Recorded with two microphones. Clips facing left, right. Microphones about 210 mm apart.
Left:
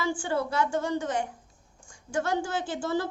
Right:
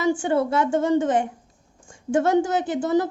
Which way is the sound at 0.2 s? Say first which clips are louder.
Right 7 dB; 20° right (ahead or behind).